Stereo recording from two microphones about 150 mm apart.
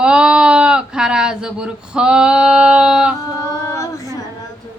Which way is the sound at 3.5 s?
20° left (ahead or behind).